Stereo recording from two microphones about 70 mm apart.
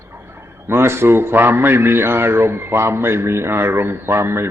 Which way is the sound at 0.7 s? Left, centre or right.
Right.